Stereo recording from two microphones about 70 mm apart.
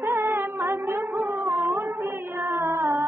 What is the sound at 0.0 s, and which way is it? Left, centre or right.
Music, right.